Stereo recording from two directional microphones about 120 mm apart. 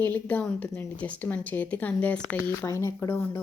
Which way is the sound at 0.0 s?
15° left (ahead or behind).